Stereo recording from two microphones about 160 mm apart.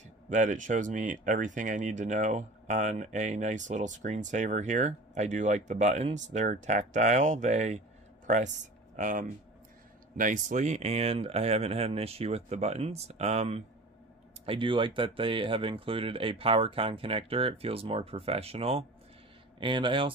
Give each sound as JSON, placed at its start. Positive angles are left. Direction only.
{"t": 0.3, "sound": "speech", "side_deg": -50}
{"t": 8.9, "sound": "speech", "side_deg": -50}